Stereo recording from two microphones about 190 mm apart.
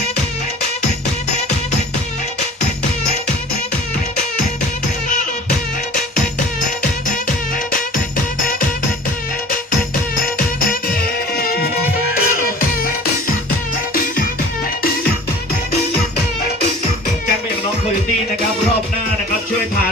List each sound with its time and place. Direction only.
10.2 s music: 50° left (ahead or behind)